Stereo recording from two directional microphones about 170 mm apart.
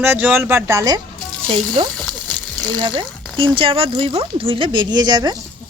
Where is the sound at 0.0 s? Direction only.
15° right (ahead or behind).